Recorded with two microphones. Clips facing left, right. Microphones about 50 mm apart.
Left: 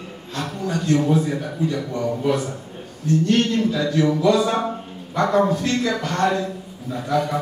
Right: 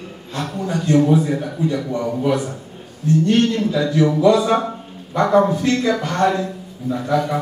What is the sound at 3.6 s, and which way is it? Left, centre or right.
A man's voice, centre.